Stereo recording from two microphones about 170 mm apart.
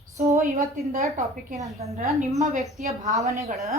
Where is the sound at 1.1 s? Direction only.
45° right (ahead or behind).